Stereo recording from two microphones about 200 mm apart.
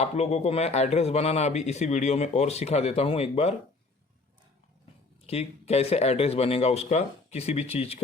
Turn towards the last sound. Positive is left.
turn(degrees=30)  # may be behind; listen again after turning